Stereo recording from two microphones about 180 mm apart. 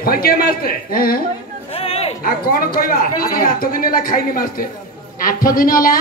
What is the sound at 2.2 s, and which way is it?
A man's voice, 50° left (ahead or behind).